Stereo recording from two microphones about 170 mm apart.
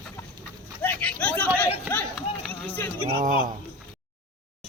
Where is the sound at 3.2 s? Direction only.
55° right (ahead or behind).